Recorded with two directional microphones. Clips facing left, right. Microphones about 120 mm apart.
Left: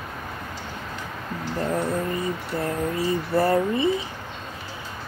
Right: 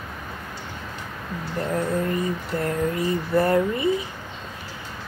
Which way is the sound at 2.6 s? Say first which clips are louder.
Right 1 dB; 30° left (ahead or behind).